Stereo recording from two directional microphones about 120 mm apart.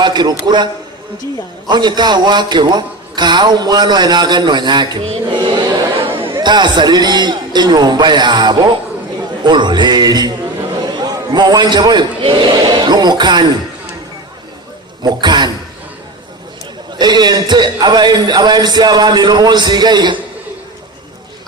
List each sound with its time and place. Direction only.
0.0 s a man's voice: 35° right (ahead or behind)
15.0 s a man's voice: 35° right (ahead or behind)
17.0 s a man's voice: 35° right (ahead or behind)